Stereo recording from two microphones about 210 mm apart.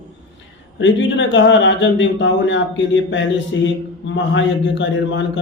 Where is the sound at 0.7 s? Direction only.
60° left (ahead or behind).